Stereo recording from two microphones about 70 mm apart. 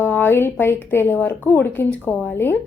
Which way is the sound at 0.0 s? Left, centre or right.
Left.